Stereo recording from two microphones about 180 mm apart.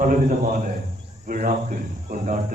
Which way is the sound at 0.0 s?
45° right (ahead or behind).